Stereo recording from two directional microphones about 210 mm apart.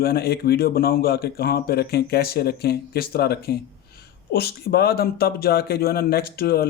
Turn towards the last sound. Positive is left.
turn(degrees=45)  # may be behind; listen again after turning